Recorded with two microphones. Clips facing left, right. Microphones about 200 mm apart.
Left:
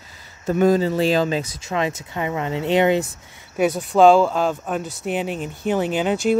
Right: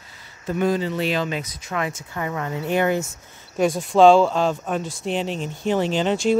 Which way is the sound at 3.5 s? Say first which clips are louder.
Even; 5° left (ahead or behind).